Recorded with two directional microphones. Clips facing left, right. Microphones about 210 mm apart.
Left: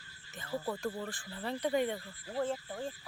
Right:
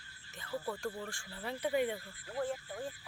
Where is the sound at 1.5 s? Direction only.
5° right (ahead or behind).